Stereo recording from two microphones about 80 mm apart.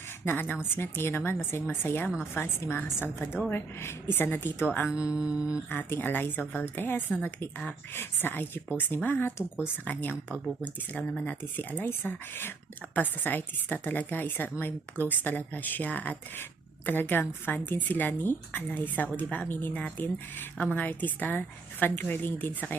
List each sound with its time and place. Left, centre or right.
0.3 s a woman's voice: left
4.9 s a woman's voice: left
5.6 s speech: left
11.8 s speech: left